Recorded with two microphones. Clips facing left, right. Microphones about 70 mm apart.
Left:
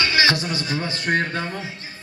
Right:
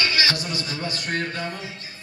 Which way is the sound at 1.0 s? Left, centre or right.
Left.